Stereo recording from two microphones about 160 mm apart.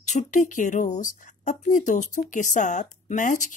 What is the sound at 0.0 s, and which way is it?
Speech, 45° left (ahead or behind).